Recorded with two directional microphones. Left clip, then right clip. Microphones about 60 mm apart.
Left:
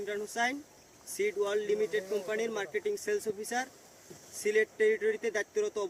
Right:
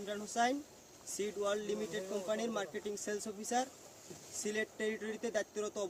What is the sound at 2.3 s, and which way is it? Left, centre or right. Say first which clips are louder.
Speech: left 4 dB; right.